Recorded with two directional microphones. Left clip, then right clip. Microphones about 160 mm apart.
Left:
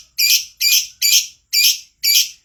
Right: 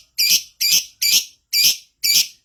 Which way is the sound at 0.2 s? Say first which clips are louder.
Left 2 dB; 25° right (ahead or behind).